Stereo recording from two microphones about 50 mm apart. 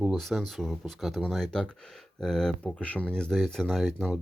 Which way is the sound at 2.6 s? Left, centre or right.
Left.